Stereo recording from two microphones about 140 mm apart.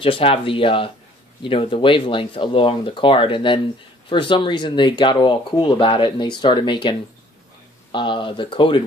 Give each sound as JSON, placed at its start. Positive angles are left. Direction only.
{"t": 0.0, "sound": "speech", "side_deg": 40}